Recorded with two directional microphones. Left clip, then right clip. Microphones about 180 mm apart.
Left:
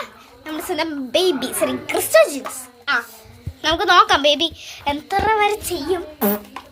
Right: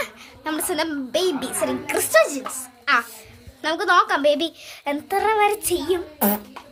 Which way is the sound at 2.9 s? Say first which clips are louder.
Right 1 dB; 10° right (ahead or behind).